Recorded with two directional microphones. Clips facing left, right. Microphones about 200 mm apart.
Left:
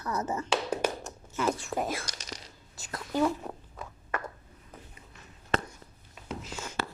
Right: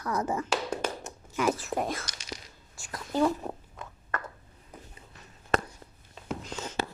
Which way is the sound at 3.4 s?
30° right (ahead or behind).